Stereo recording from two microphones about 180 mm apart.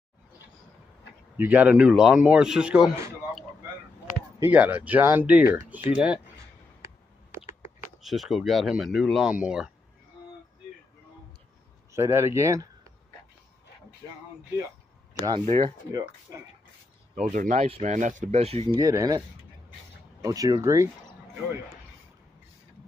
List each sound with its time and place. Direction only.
1.3 s speech: 10° right (ahead or behind)
8.0 s speech: centre (ahead or behind)
11.9 s speech: 15° right (ahead or behind)
15.2 s speech: 25° right (ahead or behind)
17.1 s speech: 40° right (ahead or behind)
18.8 s speech: 20° right (ahead or behind)